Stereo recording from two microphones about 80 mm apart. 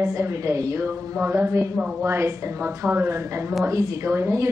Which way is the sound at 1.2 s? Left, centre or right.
Right.